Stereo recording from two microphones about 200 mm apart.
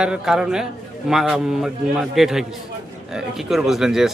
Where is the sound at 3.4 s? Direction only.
Centre (ahead or behind).